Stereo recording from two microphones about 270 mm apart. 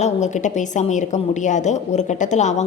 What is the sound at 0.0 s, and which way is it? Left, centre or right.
A woman's voice, left.